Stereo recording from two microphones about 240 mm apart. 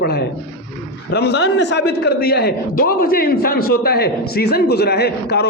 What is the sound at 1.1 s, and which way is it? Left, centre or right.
A man's voice, left.